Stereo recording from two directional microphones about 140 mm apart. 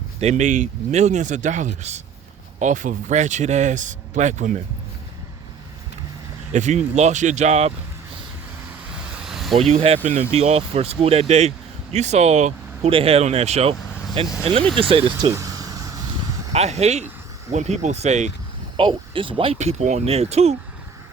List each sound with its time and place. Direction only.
0.2 s speech: 55° right (ahead or behind)
6.5 s speech: 60° right (ahead or behind)
8.9 s vehicle: 5° right (ahead or behind)
9.6 s speech: 45° right (ahead or behind)
12.9 s speech: 45° right (ahead or behind)
15.2 s a sound: 25° right (ahead or behind)
16.5 s speech: 50° right (ahead or behind)
18.8 s speech: 35° right (ahead or behind)
19.5 s speech: 60° right (ahead or behind)